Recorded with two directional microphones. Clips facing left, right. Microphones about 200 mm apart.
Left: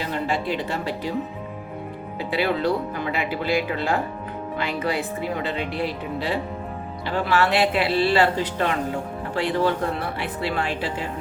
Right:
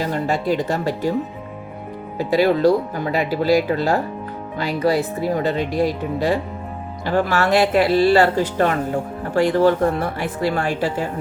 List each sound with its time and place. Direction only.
0.0 s speech: 40° right (ahead or behind)
2.1 s speech: 40° right (ahead or behind)